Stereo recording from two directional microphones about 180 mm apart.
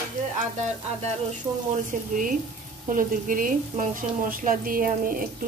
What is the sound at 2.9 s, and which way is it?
Speech, 50° right (ahead or behind).